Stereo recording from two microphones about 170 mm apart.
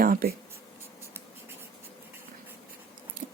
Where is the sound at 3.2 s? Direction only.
50° right (ahead or behind).